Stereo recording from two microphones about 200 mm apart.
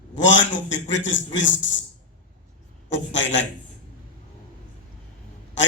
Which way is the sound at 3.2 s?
65° left (ahead or behind).